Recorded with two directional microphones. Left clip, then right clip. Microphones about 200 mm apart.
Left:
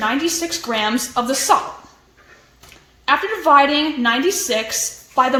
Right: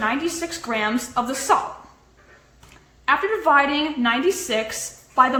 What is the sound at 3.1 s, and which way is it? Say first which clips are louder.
A woman's voice: left 3 dB; 45° left (ahead or behind).